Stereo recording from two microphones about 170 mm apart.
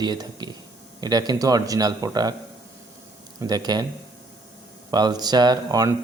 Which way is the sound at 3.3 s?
25° right (ahead or behind).